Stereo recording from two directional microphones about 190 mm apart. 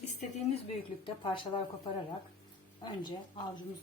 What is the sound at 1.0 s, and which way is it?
Speech, 25° left (ahead or behind).